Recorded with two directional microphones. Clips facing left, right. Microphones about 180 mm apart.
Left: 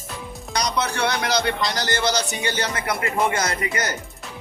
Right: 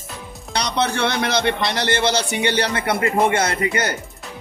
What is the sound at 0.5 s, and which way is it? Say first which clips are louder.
Speech: right 3 dB; 30° right (ahead or behind).